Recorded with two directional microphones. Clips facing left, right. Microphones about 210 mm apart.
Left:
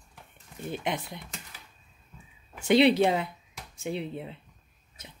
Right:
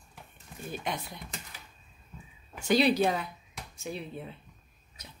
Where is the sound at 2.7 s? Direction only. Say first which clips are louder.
Left 4 dB; 25° left (ahead or behind).